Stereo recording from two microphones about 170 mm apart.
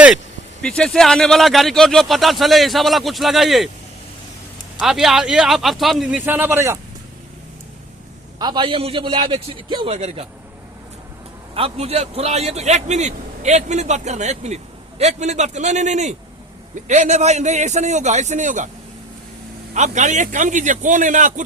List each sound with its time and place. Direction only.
0.6 s a man's voice: 5° left (ahead or behind)
4.8 s a man's voice: centre (ahead or behind)
8.4 s a man's voice: 25° right (ahead or behind)
11.5 s a man's voice: 35° right (ahead or behind)
19.7 s a man's voice: 45° right (ahead or behind)